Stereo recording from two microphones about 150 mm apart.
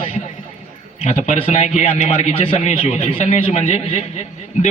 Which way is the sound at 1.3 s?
50° left (ahead or behind).